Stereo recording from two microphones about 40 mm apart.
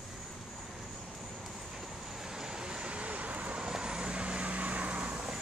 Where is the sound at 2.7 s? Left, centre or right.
Right.